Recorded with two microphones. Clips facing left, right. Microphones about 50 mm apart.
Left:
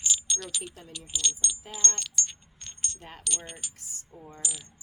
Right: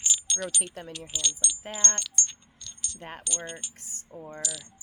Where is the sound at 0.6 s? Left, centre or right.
Right.